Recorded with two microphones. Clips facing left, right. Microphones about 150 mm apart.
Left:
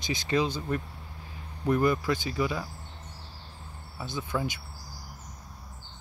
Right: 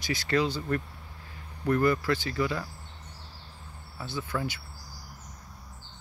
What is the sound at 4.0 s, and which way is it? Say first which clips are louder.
Speech: left 1 dB; 15° left (ahead or behind).